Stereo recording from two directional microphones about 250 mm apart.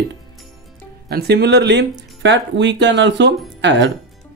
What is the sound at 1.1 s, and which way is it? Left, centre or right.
Speech, right.